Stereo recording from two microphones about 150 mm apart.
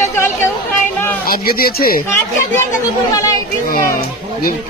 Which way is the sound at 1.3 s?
80° left.